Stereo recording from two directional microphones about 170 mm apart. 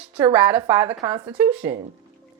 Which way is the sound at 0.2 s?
15° right (ahead or behind).